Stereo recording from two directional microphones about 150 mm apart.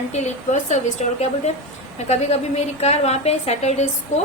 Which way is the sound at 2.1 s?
45° left (ahead or behind).